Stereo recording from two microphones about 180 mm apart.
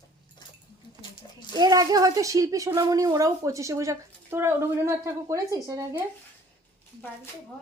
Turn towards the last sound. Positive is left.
turn(degrees=-20)  # may be behind; listen again after turning